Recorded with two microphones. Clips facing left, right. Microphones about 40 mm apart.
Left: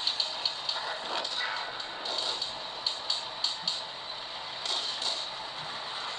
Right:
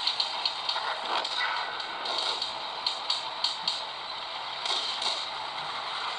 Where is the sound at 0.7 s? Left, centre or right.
Centre.